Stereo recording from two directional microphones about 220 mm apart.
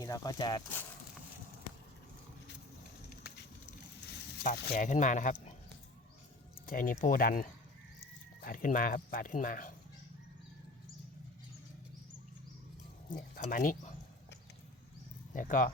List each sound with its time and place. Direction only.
0.0 s speech: 15° left (ahead or behind)
4.4 s speech: 35° left (ahead or behind)
6.7 s speech: 40° left (ahead or behind)
13.1 s speech: 35° left (ahead or behind)
15.3 s speech: 35° left (ahead or behind)